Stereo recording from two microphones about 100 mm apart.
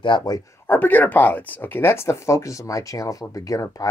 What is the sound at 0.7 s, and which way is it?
Speech, 20° left (ahead or behind).